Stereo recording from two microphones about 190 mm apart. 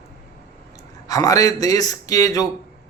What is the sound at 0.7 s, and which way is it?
A man's voice, 20° left (ahead or behind).